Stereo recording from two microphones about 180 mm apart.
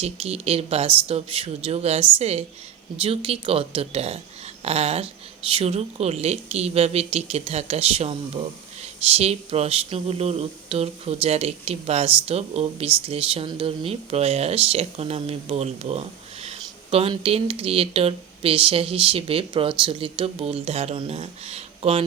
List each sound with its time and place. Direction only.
0.0 s speech: 35° right (ahead or behind)